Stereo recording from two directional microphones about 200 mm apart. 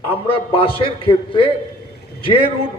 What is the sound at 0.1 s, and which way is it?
A man's voice, 25° left (ahead or behind).